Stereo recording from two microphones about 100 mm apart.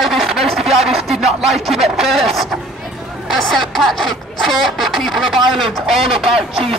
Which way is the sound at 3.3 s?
Centre (ahead or behind).